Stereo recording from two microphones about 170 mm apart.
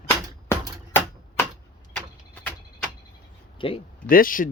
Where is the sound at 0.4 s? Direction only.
15° left (ahead or behind).